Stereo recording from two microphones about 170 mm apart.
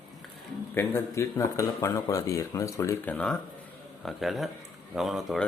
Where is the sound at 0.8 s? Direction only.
15° left (ahead or behind).